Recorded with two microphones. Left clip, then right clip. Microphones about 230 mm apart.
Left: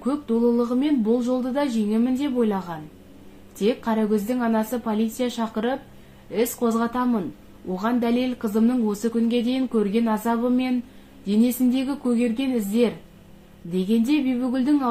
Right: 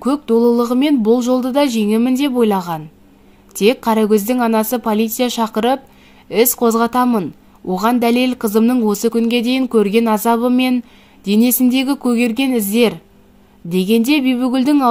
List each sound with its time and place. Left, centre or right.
0.0 s a woman's voice: right